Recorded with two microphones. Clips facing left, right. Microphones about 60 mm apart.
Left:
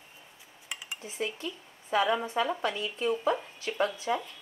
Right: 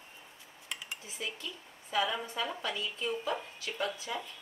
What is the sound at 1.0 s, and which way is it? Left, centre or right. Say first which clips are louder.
A woman's voice: left 11 dB; left.